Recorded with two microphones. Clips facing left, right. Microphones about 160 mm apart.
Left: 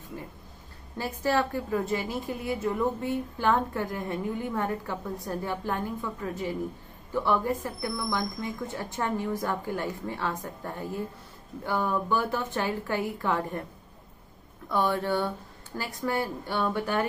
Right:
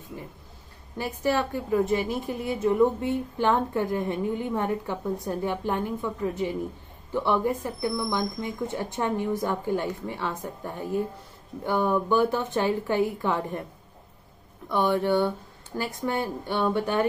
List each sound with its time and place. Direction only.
0.9 s a woman's voice: 20° right (ahead or behind)
14.7 s a woman's voice: 20° right (ahead or behind)